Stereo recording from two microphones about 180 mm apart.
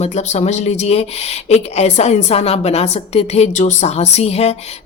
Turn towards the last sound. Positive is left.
turn(degrees=35)  # may be behind; listen again after turning